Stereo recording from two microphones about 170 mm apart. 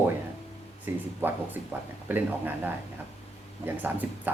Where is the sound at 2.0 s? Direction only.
10° right (ahead or behind).